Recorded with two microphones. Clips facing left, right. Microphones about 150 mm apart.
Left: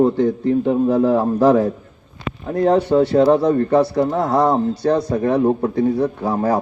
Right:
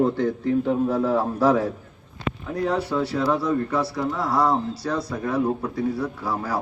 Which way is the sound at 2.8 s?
65° left (ahead or behind).